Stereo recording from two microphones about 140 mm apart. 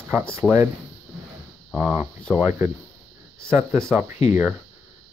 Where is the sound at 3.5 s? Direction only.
20° right (ahead or behind).